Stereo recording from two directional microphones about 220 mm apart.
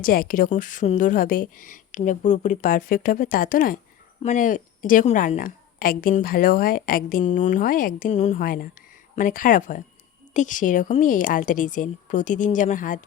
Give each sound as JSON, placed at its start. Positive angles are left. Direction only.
{"t": 0.0, "sound": "a woman's voice", "side_deg": 40}